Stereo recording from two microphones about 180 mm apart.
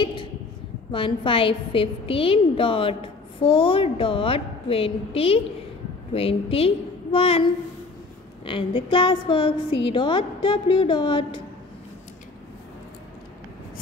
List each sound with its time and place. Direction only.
0.0 s a woman's voice: 25° left (ahead or behind)
8.5 s a woman's voice: 30° left (ahead or behind)